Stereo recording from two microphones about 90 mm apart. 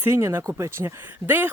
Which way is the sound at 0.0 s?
30° right (ahead or behind).